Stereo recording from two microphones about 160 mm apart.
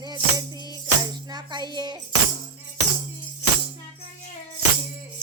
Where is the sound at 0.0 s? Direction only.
25° right (ahead or behind).